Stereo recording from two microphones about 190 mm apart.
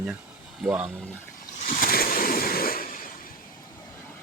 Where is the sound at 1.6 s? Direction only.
45° left (ahead or behind).